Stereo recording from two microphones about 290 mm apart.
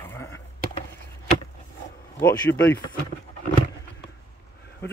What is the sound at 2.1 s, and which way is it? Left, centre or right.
Speech, centre.